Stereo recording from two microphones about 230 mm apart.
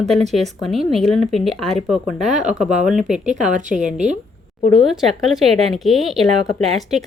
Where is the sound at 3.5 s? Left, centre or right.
Right.